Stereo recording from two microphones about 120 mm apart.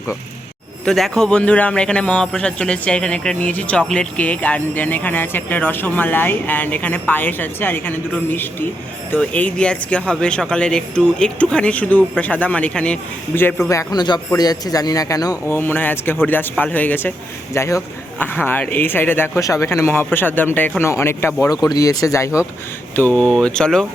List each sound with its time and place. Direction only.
0.9 s a man's voice: centre (ahead or behind)
13.7 s speech: 30° left (ahead or behind)
15.4 s a man's voice: 15° left (ahead or behind)
23.0 s a man's voice: 10° left (ahead or behind)